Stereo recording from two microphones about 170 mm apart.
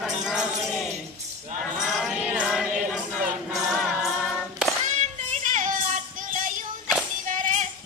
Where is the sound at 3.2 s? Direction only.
Centre (ahead or behind).